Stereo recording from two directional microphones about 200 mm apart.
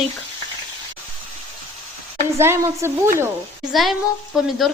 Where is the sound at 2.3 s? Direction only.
10° right (ahead or behind).